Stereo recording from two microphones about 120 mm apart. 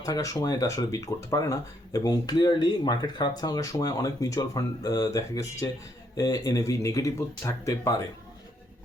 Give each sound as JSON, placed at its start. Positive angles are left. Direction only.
{"t": 0.0, "sound": "speech", "side_deg": 30}